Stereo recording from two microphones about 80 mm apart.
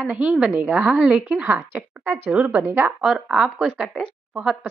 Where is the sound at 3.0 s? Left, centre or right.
Centre.